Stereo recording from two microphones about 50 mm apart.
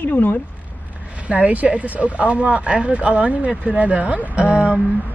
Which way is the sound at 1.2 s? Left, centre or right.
Right.